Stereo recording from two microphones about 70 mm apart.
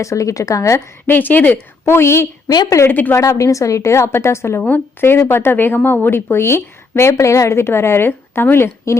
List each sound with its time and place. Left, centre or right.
0.0 s a woman's voice: left
1.0 s speech: left
1.8 s a woman's voice: left
2.9 s speech: left
3.2 s a woman's voice: left
4.6 s speech: left